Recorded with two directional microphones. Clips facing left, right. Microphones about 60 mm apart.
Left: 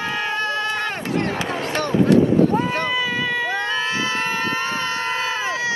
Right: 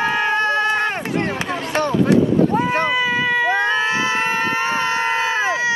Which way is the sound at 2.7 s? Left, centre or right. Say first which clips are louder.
Right 4 dB; right.